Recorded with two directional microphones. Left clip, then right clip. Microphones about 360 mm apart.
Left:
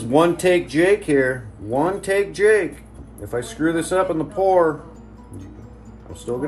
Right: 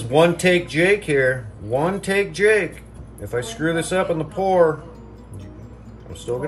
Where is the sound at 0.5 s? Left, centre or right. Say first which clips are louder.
Left 1 dB; centre.